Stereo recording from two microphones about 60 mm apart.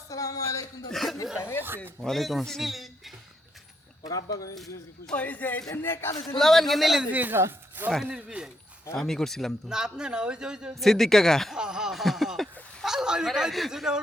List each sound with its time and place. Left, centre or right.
0.1 s speech: left
0.9 s a man's voice: centre
4.1 s speech: left
4.5 s a man's voice: centre
5.1 s a man's voice: left
5.7 s speech: left
6.2 s a man's voice: centre
7.1 s speech: right
7.3 s speech: right
8.0 s speech: centre
9.0 s speech: centre
9.6 s speech: centre
10.8 s a man's voice: centre
11.5 s speech: centre